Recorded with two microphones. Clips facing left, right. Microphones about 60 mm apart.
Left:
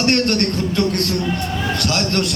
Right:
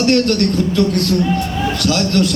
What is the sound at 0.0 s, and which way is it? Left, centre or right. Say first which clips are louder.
A man's voice: right 3 dB; left.